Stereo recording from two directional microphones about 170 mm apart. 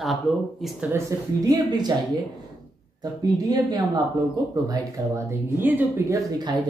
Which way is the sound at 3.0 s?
25° right (ahead or behind).